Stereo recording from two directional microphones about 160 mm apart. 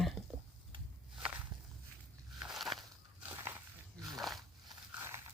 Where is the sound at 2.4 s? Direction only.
Centre (ahead or behind).